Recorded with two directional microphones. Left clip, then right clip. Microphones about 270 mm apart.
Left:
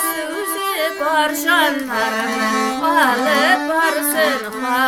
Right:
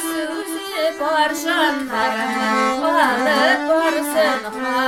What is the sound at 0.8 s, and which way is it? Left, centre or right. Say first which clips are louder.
Music: right 1 dB; centre.